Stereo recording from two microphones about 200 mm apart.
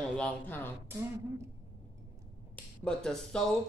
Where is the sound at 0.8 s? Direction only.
10° right (ahead or behind).